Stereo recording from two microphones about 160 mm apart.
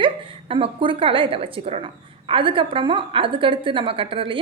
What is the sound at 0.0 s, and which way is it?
A woman's voice, 35° right (ahead or behind).